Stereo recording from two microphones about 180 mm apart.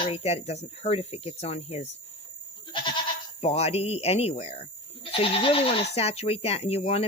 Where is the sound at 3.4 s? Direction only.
35° left (ahead or behind).